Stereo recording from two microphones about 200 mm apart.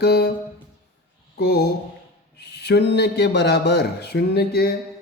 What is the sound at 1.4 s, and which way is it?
Mantra, 55° left (ahead or behind).